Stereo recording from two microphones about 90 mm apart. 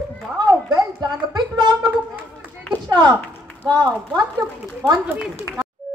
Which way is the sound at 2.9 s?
50° right (ahead or behind).